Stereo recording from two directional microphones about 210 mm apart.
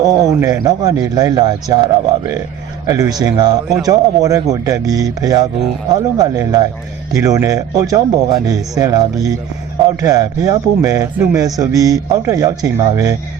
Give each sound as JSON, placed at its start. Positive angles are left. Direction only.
{"t": 0.0, "sound": "a man's voice", "side_deg": -15}